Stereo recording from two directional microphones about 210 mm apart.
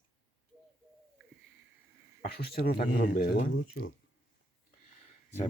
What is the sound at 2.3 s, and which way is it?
Speech, 45° left (ahead or behind).